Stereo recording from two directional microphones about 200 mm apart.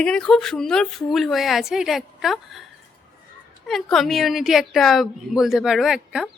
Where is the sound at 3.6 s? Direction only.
Centre (ahead or behind).